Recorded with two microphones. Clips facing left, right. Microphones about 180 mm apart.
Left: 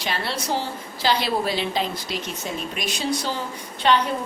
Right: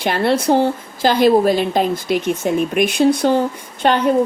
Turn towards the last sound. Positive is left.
turn(degrees=-50)  # may be behind; listen again after turning